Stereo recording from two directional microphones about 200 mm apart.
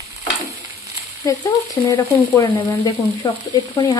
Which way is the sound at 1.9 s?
20° left (ahead or behind).